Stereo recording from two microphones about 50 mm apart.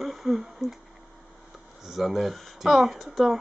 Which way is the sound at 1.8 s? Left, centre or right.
Centre.